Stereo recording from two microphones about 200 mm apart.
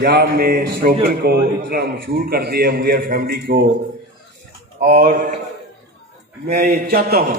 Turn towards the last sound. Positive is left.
turn(degrees=-50)  # may be behind; listen again after turning